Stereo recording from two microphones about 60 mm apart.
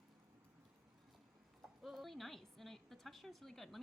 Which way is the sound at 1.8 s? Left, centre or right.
Centre.